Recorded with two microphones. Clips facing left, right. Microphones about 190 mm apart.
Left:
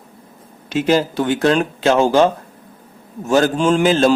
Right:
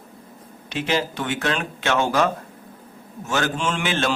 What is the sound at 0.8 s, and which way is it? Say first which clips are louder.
Speech: left 8 dB; 40° left (ahead or behind).